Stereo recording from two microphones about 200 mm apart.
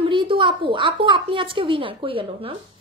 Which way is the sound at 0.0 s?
25° right (ahead or behind).